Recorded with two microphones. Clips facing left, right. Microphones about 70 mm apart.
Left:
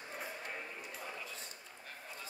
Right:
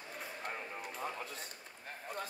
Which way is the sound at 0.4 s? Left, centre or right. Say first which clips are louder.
Right 3 dB; right.